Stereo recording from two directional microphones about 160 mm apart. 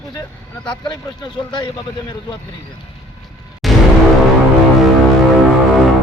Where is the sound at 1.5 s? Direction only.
30° left (ahead or behind).